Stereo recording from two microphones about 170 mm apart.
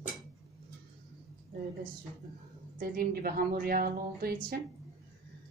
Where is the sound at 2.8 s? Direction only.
60° right (ahead or behind).